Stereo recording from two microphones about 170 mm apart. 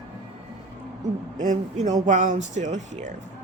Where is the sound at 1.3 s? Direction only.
45° right (ahead or behind).